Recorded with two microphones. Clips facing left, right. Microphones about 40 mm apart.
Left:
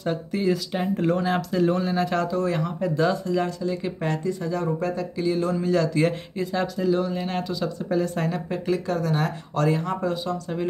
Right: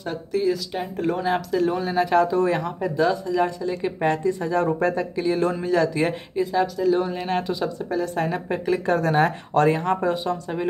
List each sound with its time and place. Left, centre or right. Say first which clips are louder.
0.0 s speech: right 1 dB; centre
2.3 s speech: right 4 dB; right
3.0 s speech: right 3 dB; centre
3.4 s speech: right 2 dB; centre
4.6 s speech: right 4 dB; right
5.7 s speech: left 1 dB; centre
6.3 s speech: right 4 dB; centre
6.9 s speech: right 2 dB; right
7.9 s speech: left 1 dB; centre
8.3 s speech: right 2 dB; centre
8.8 s speech: right 5 dB; right